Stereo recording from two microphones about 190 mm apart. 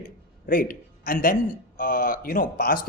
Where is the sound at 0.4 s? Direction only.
50° left (ahead or behind).